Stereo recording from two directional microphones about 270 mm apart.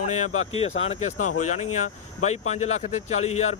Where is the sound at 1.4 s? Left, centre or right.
Left.